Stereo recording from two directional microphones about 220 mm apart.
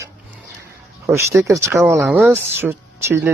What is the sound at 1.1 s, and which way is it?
Speech, 15° right (ahead or behind).